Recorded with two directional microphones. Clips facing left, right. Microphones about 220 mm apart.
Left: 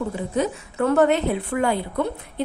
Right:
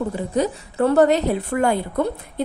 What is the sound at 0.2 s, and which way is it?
A woman's voice, 35° right (ahead or behind).